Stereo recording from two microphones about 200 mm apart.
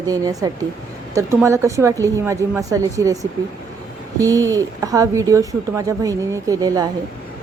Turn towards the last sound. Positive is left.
turn(degrees=-20)  # may be behind; listen again after turning